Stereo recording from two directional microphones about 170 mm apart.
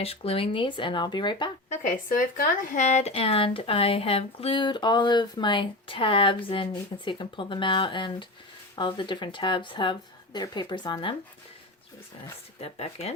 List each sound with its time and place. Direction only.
0.0 s speech: 35° left (ahead or behind)
1.7 s speech: 50° left (ahead or behind); by 11.2 s 30° left (ahead or behind)
12.5 s speech: 35° left (ahead or behind)